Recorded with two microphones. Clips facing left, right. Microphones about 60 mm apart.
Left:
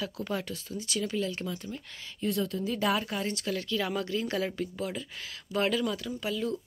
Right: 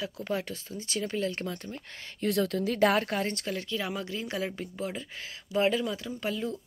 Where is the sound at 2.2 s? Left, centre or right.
Right.